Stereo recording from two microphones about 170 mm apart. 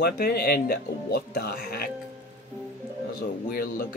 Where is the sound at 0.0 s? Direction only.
65° left (ahead or behind).